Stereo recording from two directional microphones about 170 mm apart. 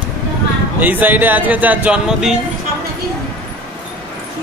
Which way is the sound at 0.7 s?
10° right (ahead or behind).